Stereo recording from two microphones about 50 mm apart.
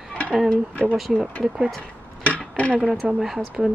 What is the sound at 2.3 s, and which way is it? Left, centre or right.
Dishes, left.